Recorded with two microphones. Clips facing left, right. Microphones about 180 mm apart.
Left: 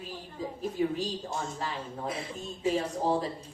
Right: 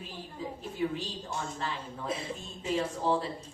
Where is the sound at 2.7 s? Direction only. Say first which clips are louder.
Right 2 dB; 40° left (ahead or behind).